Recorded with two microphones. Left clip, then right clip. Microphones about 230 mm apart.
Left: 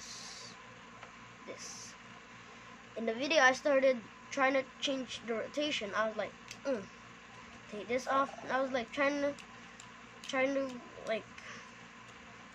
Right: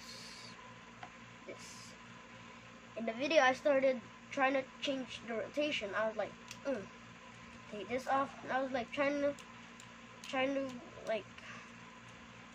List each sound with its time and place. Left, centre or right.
3.1 s a woman's voice: left
7.9 s a woman's voice: left
10.3 s a woman's voice: left